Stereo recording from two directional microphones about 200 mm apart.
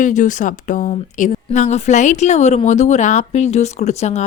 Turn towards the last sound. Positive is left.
turn(degrees=35)  # may be behind; listen again after turning